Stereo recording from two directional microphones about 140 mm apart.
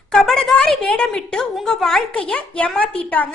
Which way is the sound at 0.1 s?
5° left (ahead or behind).